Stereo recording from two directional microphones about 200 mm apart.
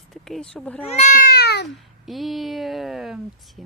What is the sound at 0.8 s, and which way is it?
Speech, 35° left (ahead or behind).